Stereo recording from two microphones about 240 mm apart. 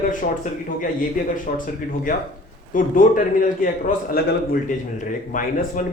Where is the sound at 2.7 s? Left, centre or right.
Left.